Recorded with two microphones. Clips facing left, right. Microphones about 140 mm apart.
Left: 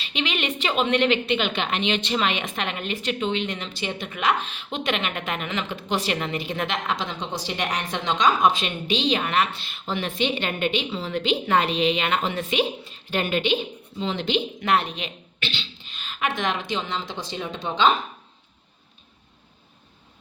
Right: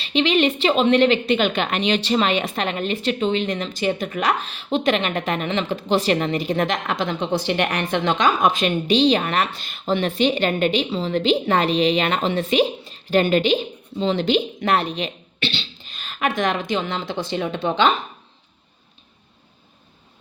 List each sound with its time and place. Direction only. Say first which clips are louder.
0.0 s a woman's voice: right 9 dB; 35° right (ahead or behind)
6.8 s a woman's voice: right 5 dB; 55° right (ahead or behind)